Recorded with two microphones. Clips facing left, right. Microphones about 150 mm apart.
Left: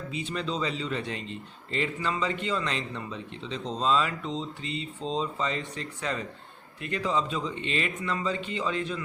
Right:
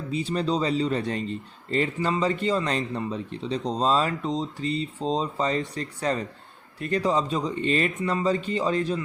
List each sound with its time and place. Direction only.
0.1 s speech: 35° right (ahead or behind)